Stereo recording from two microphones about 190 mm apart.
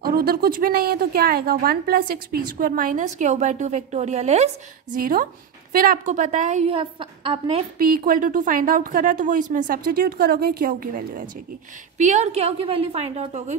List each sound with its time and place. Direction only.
0.0 s a woman's voice: 50° right (ahead or behind); by 4.5 s 35° right (ahead or behind)
5.0 s a woman's voice: 45° right (ahead or behind)
6.8 s a woman's voice: 30° right (ahead or behind)
8.0 s a woman's voice: 45° right (ahead or behind)